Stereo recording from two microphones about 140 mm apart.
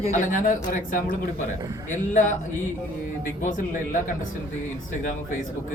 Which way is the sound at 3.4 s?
75° left (ahead or behind).